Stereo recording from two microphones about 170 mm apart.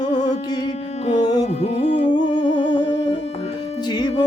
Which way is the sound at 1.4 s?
40° left (ahead or behind).